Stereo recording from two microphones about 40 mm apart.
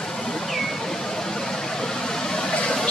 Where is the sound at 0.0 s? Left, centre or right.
Centre.